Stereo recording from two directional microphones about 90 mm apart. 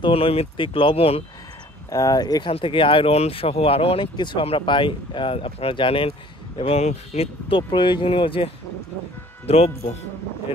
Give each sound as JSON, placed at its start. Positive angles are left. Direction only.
{"t": 0.0, "sound": "speech", "side_deg": 90}
{"t": 1.9, "sound": "speech", "side_deg": 40}
{"t": 2.5, "sound": "speech", "side_deg": 70}
{"t": 9.5, "sound": "speech", "side_deg": 90}